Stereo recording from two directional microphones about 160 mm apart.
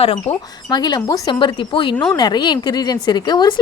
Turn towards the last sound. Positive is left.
turn(degrees=25)  # may be behind; listen again after turning